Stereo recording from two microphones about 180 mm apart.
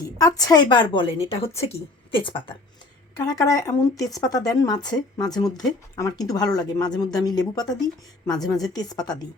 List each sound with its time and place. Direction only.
0.2 s speech: 20° left (ahead or behind)